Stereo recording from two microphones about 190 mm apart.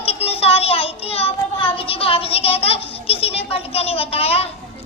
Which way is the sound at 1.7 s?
30° left (ahead or behind).